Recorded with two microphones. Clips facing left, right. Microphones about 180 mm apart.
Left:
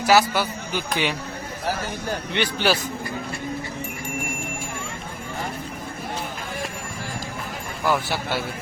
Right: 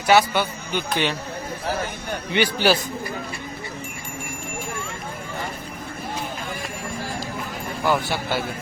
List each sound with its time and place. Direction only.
0.0 s a man's voice: 5° left (ahead or behind)
2.3 s a man's voice: 10° right (ahead or behind)
7.9 s a man's voice: centre (ahead or behind)